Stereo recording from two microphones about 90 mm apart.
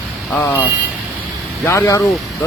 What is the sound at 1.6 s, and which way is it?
Speech, 30° left (ahead or behind).